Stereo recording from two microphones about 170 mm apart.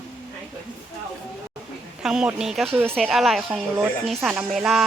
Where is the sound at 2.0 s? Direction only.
5° right (ahead or behind).